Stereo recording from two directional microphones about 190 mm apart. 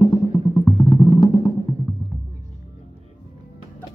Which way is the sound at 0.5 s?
15° left (ahead or behind).